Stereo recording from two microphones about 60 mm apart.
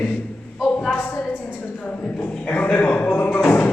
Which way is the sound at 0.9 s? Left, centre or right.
Left.